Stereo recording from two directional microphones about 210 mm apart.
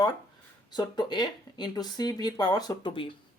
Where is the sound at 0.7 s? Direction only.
20° left (ahead or behind).